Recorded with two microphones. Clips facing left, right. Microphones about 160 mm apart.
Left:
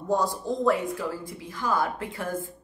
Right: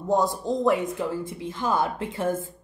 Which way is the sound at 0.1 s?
20° right (ahead or behind).